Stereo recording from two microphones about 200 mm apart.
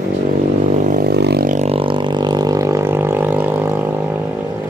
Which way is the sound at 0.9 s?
50° right (ahead or behind).